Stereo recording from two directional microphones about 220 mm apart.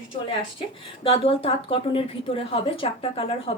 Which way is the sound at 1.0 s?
25° left (ahead or behind).